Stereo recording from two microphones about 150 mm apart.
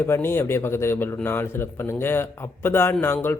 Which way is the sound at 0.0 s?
15° left (ahead or behind).